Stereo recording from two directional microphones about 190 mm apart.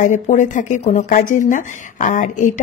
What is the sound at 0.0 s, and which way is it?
Speech, 40° left (ahead or behind).